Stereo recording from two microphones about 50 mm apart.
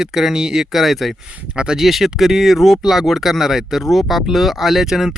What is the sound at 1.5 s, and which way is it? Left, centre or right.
Speech, centre.